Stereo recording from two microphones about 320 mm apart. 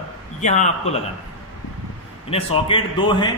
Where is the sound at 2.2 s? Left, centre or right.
Centre.